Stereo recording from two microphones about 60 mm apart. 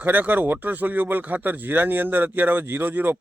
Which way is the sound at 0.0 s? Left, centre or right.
Right.